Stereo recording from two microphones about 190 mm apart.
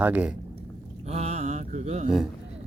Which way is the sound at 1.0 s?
35° right (ahead or behind).